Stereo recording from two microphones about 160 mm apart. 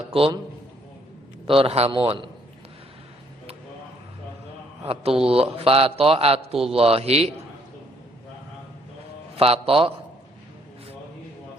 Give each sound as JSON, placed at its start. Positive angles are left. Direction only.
{"t": 0.1, "sound": "a man's voice", "side_deg": -35}
{"t": 1.5, "sound": "speech", "side_deg": -35}
{"t": 4.9, "sound": "speech", "side_deg": -35}
{"t": 9.3, "sound": "a man's voice", "side_deg": -40}